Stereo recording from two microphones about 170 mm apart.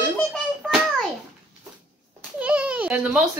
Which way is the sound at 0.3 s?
Centre (ahead or behind).